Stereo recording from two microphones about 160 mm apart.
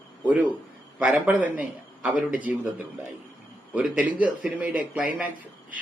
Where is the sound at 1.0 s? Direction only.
10° right (ahead or behind).